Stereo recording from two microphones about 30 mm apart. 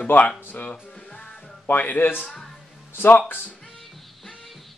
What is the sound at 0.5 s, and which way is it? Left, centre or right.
Speech, left.